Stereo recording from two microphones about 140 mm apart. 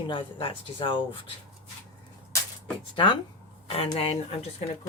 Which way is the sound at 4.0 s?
45° left (ahead or behind).